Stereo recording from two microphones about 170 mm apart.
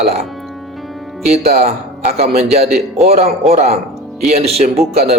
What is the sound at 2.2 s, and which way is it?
A man's voice, 40° right (ahead or behind).